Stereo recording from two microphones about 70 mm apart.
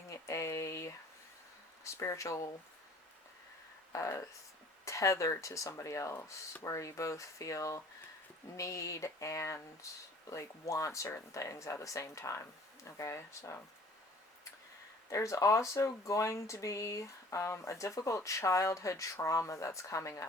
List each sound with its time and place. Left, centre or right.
0.1 s a sound: left
1.8 s speech: left
3.9 s speech: left
15.1 s speech: left